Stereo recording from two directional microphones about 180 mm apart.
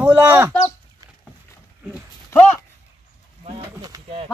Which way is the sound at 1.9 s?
10° left (ahead or behind).